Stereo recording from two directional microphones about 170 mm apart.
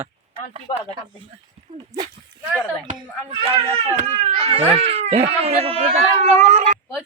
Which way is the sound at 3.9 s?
35° right (ahead or behind).